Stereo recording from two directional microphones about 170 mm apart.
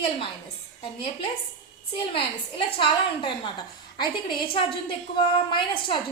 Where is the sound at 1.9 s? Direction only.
35° left (ahead or behind).